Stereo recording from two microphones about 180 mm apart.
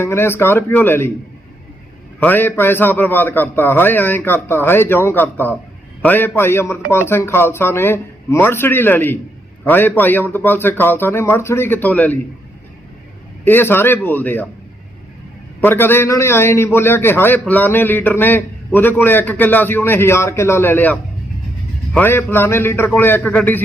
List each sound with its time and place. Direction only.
0.0 s a man's voice: 15° left (ahead or behind)
2.2 s a man's voice: 10° left (ahead or behind)
13.4 s a man's voice: 10° left (ahead or behind)
15.6 s a man's voice: 10° left (ahead or behind)